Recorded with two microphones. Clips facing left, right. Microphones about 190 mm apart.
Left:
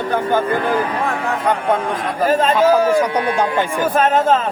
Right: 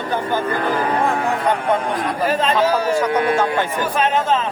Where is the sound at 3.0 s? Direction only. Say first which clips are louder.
Even; 15° left (ahead or behind).